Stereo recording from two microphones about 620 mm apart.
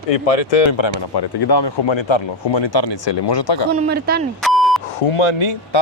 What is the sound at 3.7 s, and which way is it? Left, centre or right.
Speech, centre.